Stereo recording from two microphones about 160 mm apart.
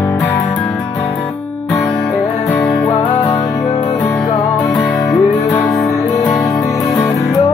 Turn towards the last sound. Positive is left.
turn(degrees=0)  # may be behind; listen again after turning